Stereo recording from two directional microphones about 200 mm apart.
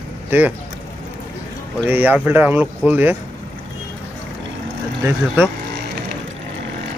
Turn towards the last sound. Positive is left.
turn(degrees=-10)  # may be behind; listen again after turning